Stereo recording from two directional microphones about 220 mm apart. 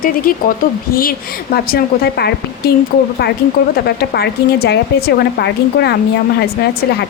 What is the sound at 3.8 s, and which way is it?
A woman's voice, 50° left (ahead or behind).